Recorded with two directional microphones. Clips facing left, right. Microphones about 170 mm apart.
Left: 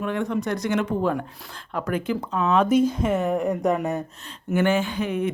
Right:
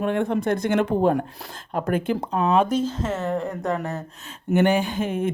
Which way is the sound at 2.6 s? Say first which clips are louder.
Left 4 dB; 10° left (ahead or behind).